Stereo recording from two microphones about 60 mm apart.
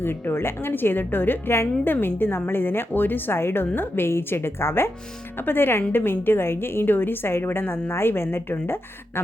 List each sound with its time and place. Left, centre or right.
0.0 s a woman's voice: left